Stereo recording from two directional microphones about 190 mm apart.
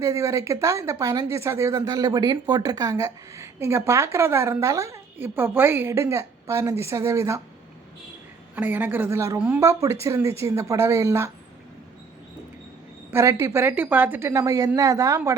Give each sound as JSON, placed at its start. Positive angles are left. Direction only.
{"t": 0.0, "sound": "speech", "side_deg": -15}
{"t": 8.5, "sound": "speech", "side_deg": -10}
{"t": 13.1, "sound": "speech", "side_deg": -15}